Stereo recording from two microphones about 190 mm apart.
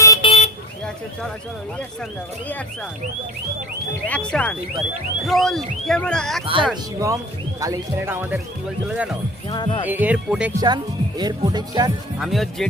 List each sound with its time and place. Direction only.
0.0 s vehicle: 20° left (ahead or behind)
4.1 s speech: 5° left (ahead or behind)
6.4 s speech: 25° right (ahead or behind)
7.6 s speech: 15° right (ahead or behind)
9.5 s speech: 25° left (ahead or behind)
9.8 s speech: 10° right (ahead or behind)
11.2 s speech: 20° right (ahead or behind)
12.2 s speech: centre (ahead or behind)